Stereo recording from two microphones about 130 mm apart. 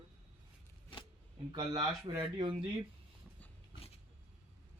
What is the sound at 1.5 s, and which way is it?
Speech, 30° right (ahead or behind).